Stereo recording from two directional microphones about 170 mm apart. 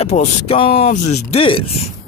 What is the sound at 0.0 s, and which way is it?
Speech, 35° left (ahead or behind).